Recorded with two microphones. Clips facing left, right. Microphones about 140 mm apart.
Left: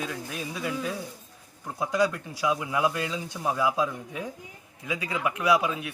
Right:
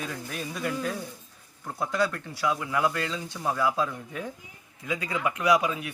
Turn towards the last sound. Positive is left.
turn(degrees=0)  # may be behind; listen again after turning